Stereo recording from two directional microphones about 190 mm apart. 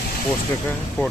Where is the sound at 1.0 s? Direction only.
15° left (ahead or behind).